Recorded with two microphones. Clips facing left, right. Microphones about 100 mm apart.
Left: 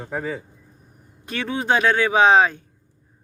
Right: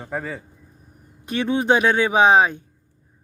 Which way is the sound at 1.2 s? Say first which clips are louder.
Right 4 dB; 20° right (ahead or behind).